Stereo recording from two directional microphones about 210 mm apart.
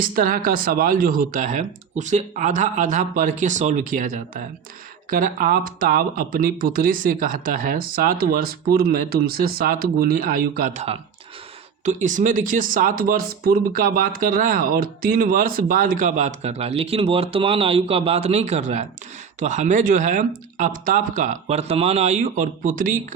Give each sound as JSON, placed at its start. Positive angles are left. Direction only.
{"t": 0.0, "sound": "speech", "side_deg": -40}